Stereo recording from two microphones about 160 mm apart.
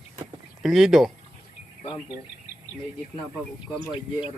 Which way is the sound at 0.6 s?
Centre (ahead or behind).